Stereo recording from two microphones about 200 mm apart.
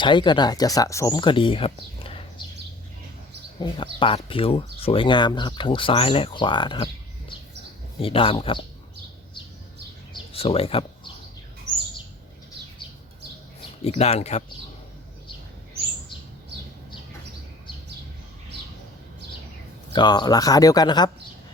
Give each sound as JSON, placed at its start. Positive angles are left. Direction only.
{"t": 0.0, "sound": "speech", "side_deg": 25}
{"t": 4.0, "sound": "speech", "side_deg": 25}
{"t": 8.0, "sound": "speech", "side_deg": 25}
{"t": 10.3, "sound": "speech", "side_deg": 30}
{"t": 13.8, "sound": "speech", "side_deg": 30}
{"t": 19.9, "sound": "speech", "side_deg": 20}